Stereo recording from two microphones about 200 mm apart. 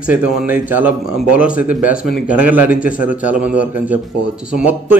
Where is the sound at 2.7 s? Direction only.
40° left (ahead or behind).